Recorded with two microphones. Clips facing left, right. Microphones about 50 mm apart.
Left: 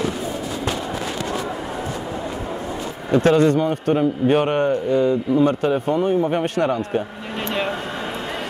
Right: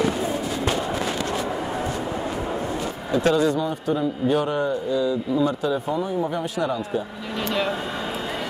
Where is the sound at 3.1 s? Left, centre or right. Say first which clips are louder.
Left 5 dB; left.